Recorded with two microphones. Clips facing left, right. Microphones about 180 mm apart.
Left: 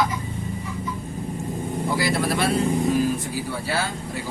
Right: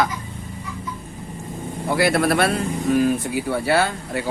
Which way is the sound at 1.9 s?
60° right (ahead or behind).